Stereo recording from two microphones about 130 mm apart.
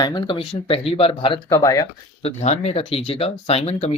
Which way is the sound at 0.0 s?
35° left (ahead or behind).